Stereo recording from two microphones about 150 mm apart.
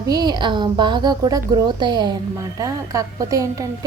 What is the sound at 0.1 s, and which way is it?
A woman's voice, 30° right (ahead or behind).